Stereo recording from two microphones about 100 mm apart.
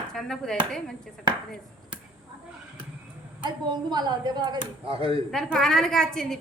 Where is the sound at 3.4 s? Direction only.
45° right (ahead or behind); by 5.2 s 70° right (ahead or behind).